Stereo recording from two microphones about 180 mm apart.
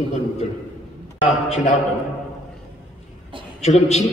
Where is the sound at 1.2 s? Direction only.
45° left (ahead or behind).